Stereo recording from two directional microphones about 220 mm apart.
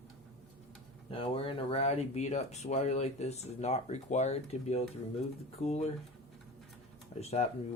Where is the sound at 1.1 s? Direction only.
25° left (ahead or behind).